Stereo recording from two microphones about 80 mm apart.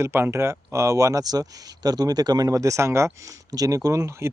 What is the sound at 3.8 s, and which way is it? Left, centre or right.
Speech, right.